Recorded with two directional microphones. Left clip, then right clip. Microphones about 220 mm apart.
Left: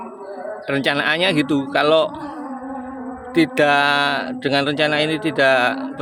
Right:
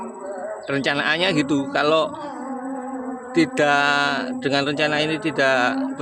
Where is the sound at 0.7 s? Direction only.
15° left (ahead or behind).